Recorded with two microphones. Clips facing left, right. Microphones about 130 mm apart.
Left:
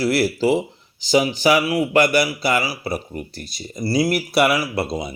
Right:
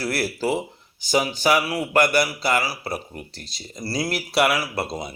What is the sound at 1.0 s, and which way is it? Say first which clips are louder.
Speech: left 4 dB; 50° right (ahead or behind).